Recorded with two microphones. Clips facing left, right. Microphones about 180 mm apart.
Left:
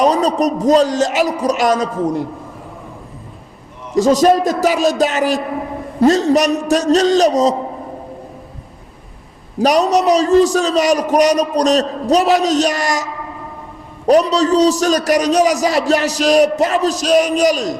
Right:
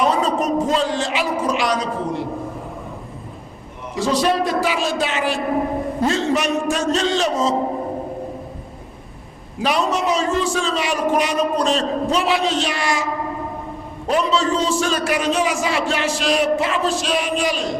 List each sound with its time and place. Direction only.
0.0 s a man's voice: 40° left (ahead or behind)
3.9 s a man's voice: 45° left (ahead or behind)
9.6 s a man's voice: 40° left (ahead or behind)
14.1 s a man's voice: 40° left (ahead or behind)